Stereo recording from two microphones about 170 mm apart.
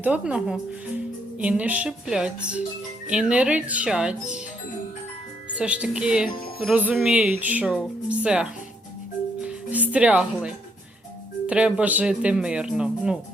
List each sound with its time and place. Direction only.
0.0 s speech: 5° right (ahead or behind)
5.5 s speech: 5° right (ahead or behind)
9.4 s music: 10° right (ahead or behind)
11.4 s speech: 5° right (ahead or behind)